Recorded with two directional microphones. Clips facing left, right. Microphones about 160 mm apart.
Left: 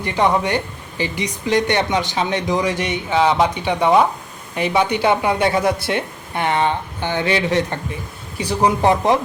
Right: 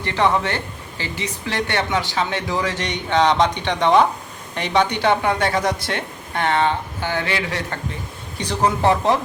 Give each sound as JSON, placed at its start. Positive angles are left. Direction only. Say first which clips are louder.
{"t": 0.0, "sound": "speech", "louder": "left 2 dB", "side_deg": 15}